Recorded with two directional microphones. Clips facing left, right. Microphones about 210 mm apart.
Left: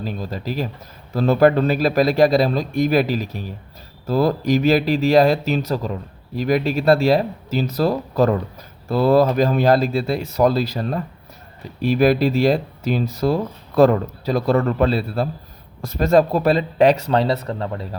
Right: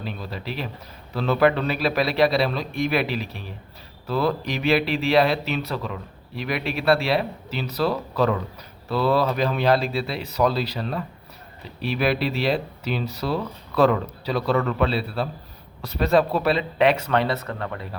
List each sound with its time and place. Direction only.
0.0 s speech: 40° left (ahead or behind)
17.1 s speech: 30° left (ahead or behind)